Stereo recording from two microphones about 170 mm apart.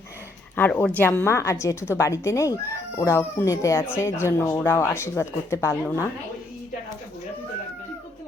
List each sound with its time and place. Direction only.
0.5 s speech: 10° left (ahead or behind)